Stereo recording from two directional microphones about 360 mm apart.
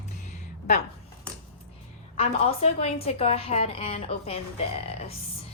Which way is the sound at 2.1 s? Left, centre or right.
Centre.